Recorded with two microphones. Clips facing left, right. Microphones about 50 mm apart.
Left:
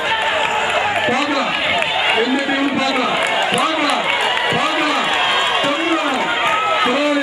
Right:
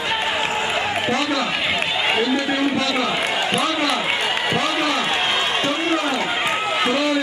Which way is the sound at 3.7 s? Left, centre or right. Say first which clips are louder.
Left 4 dB; centre.